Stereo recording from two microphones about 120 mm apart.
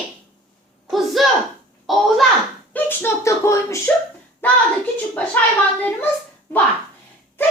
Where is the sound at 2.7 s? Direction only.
20° left (ahead or behind).